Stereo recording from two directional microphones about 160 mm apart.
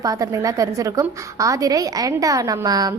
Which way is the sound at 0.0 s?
20° right (ahead or behind).